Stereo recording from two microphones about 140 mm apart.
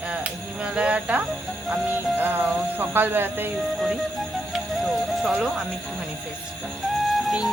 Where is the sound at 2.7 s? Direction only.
15° right (ahead or behind).